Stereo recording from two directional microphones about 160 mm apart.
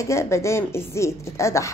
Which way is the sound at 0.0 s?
15° left (ahead or behind).